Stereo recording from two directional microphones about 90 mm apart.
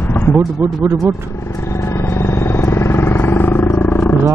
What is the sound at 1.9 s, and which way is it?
Vehicle, 30° left (ahead or behind).